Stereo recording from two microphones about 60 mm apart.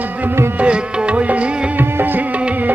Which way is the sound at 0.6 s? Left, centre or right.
Right.